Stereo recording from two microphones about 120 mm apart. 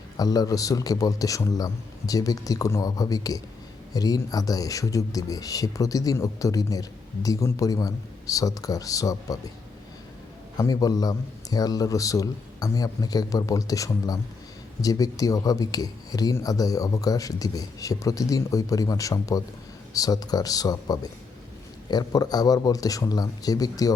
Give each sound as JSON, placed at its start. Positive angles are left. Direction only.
{"t": 0.2, "sound": "speech", "side_deg": 30}
{"t": 10.6, "sound": "speech", "side_deg": 30}